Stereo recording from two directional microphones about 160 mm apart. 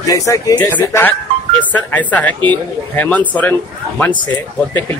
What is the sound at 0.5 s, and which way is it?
Speech, 10° left (ahead or behind).